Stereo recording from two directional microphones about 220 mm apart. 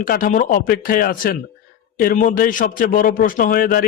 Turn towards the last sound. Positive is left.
turn(degrees=40)  # may be behind; listen again after turning